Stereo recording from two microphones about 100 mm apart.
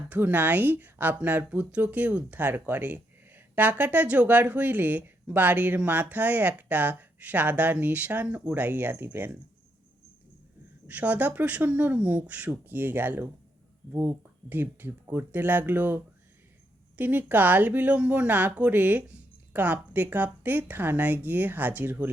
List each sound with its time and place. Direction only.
0.1 s speech: 15° right (ahead or behind)
10.8 s speech: 15° right (ahead or behind)
17.0 s speech: 20° right (ahead or behind)